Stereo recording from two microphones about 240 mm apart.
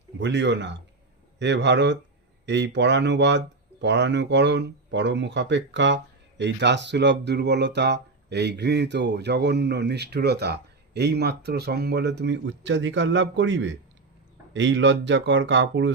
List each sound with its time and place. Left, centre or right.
0.2 s speech: right